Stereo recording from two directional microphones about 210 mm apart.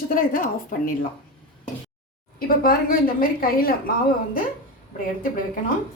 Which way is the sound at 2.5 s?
40° left (ahead or behind).